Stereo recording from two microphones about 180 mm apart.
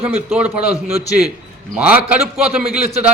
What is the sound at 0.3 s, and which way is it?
Speech, 10° right (ahead or behind).